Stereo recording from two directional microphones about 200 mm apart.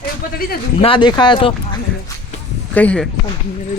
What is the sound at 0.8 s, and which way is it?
Speech, 25° left (ahead or behind).